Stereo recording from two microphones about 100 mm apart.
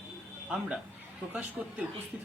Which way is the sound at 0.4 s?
5° right (ahead or behind).